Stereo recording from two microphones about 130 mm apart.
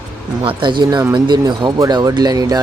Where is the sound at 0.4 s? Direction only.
40° right (ahead or behind).